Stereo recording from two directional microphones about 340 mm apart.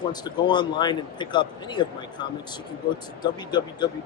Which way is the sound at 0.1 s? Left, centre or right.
Centre.